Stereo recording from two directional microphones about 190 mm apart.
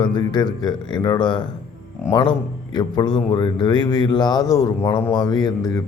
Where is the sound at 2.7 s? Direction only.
20° left (ahead or behind).